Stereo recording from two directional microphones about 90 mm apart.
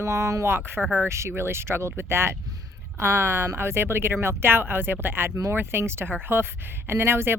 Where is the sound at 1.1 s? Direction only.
30° right (ahead or behind).